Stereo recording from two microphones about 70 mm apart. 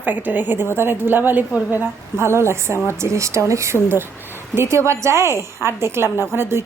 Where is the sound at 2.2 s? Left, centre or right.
Right.